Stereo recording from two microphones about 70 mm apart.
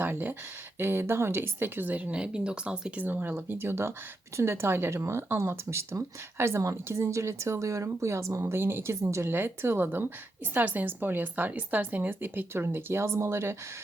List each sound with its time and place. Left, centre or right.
0.0 s speech: right
3.0 s speech: right
8.4 s speech: right